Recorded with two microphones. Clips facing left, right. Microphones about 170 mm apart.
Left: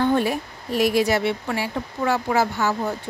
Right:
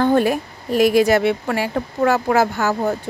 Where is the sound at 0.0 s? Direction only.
50° right (ahead or behind).